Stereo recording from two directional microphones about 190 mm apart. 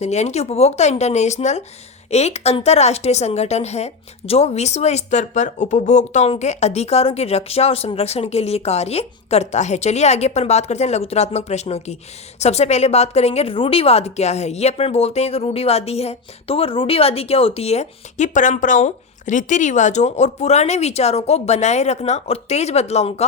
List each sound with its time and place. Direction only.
0.0 s a woman's voice: 35° left (ahead or behind)